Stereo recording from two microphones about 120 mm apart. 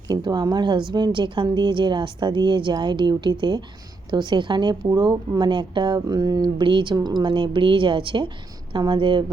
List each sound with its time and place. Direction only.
0.1 s speech: 35° right (ahead or behind)